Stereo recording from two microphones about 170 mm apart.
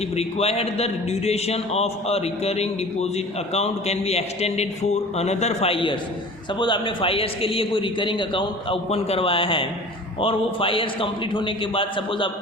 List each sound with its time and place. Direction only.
0.2 s a man's voice: 35° left (ahead or behind)